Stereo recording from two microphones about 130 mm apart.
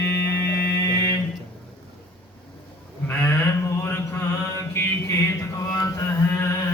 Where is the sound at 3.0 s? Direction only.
15° left (ahead or behind).